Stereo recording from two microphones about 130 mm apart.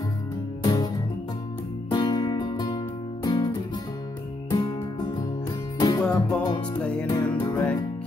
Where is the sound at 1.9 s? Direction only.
35° left (ahead or behind).